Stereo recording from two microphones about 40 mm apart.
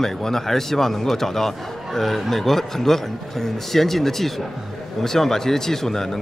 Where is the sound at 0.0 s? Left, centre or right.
Centre.